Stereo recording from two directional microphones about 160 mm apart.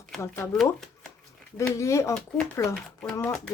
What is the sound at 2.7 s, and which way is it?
Speech, 5° left (ahead or behind).